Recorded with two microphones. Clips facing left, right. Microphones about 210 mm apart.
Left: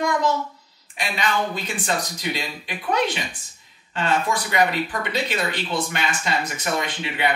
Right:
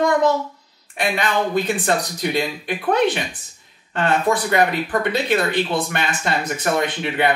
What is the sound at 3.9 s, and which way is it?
Speech, 55° right (ahead or behind).